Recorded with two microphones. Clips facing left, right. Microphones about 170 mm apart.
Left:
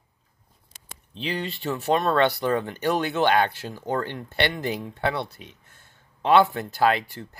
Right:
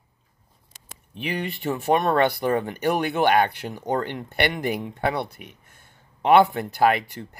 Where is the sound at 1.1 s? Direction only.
15° right (ahead or behind).